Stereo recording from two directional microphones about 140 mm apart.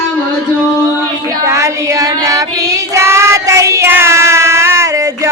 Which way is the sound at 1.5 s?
20° right (ahead or behind).